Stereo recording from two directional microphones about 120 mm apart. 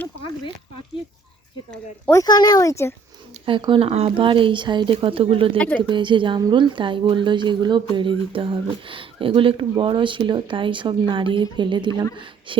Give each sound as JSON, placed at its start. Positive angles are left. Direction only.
{"t": 2.1, "sound": "speech", "side_deg": 35}
{"t": 3.4, "sound": "speech", "side_deg": -45}
{"t": 5.5, "sound": "speech", "side_deg": 10}
{"t": 5.9, "sound": "speech", "side_deg": -40}